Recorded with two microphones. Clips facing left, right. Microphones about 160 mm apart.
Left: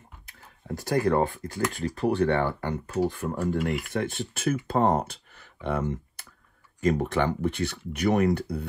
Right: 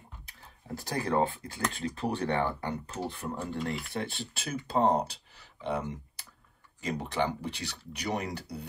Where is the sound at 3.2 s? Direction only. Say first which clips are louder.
Left 5 dB; 15° left (ahead or behind).